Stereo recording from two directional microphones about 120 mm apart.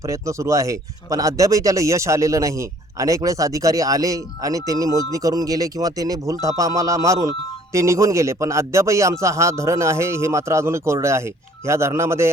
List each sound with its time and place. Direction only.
0.0 s speech: 25° right (ahead or behind)